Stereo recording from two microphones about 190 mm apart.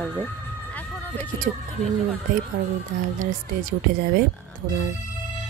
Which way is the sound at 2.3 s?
45° right (ahead or behind).